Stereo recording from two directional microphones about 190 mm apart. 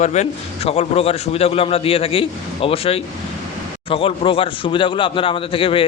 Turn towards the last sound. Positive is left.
turn(degrees=30)  # may be behind; listen again after turning